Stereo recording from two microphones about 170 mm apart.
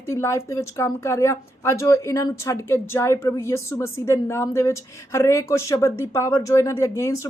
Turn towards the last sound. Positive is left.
turn(degrees=15)  # may be behind; listen again after turning